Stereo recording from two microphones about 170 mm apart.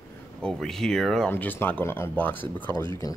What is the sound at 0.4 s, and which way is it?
Speech, 5° left (ahead or behind).